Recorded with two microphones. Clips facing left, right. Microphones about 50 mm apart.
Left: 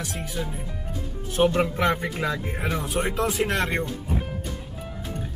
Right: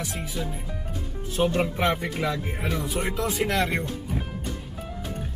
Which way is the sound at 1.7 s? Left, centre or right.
Left.